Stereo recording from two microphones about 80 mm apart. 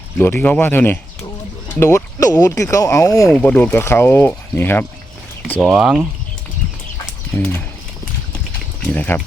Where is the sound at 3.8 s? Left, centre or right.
Left.